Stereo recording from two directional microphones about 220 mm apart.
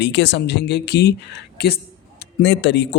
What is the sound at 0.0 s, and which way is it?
Speech, 50° left (ahead or behind).